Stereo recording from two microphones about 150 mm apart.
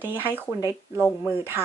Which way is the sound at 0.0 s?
10° right (ahead or behind).